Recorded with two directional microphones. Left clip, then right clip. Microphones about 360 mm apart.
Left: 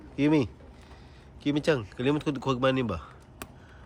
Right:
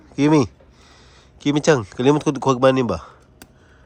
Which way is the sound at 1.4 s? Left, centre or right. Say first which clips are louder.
Right 9 dB; centre.